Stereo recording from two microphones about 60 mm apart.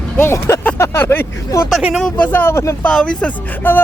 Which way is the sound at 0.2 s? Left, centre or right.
Left.